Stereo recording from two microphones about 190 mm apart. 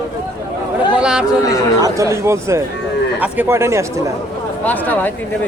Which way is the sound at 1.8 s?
15° right (ahead or behind).